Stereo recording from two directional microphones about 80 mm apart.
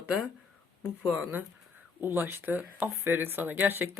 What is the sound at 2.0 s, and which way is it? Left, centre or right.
Speech, right.